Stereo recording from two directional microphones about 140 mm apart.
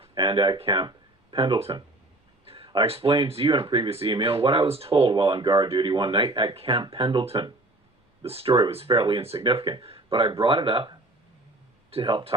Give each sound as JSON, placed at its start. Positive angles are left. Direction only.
{"t": 0.0, "sound": "speech", "side_deg": -35}